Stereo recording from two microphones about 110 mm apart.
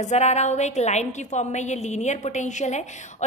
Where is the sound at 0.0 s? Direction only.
90° left.